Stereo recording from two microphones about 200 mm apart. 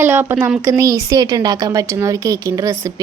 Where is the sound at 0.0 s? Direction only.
10° right (ahead or behind).